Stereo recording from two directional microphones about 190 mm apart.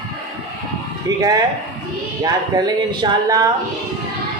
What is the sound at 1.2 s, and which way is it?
A man's voice, 20° right (ahead or behind).